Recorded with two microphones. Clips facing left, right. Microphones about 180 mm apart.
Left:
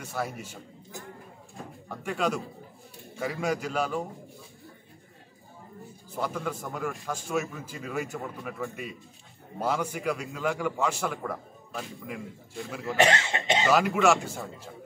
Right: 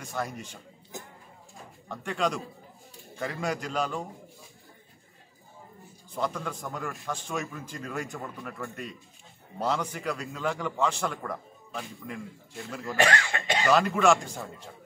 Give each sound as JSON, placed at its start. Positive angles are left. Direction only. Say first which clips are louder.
{"t": 0.0, "sound": "a man's voice", "louder": "left 1 dB", "side_deg": 5}
{"t": 1.9, "sound": "a man's voice", "louder": "even", "side_deg": 5}
{"t": 6.1, "sound": "a man's voice", "louder": "even", "side_deg": 10}
{"t": 12.9, "sound": "speech", "louder": "left 2 dB", "side_deg": 20}
{"t": 13.7, "sound": "a man's voice", "louder": "right 1 dB", "side_deg": 5}